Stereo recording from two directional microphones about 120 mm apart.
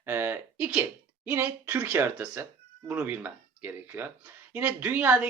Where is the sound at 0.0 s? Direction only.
20° right (ahead or behind).